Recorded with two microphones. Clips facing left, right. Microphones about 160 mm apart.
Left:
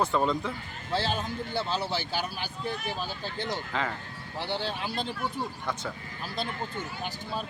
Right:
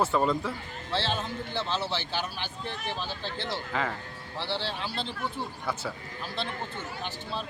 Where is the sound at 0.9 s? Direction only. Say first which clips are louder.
Left 1 dB; 10° left (ahead or behind).